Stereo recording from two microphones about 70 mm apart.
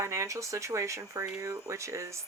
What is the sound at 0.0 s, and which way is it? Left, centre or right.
Speech, right.